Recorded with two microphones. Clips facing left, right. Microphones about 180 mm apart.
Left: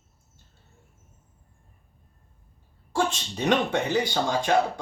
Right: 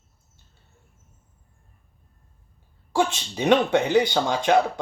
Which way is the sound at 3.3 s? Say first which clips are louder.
Right 5 dB; 75° right (ahead or behind).